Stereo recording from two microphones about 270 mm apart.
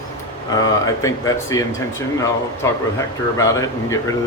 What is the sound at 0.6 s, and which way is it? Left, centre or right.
Speech, centre.